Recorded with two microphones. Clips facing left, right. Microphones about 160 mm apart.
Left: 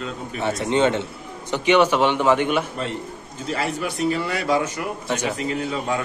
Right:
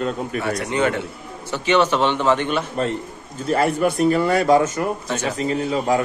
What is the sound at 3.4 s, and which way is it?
Speech, 50° right (ahead or behind).